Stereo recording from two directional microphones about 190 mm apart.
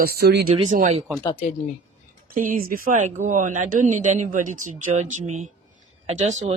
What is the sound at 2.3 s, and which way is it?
Speech, 45° right (ahead or behind).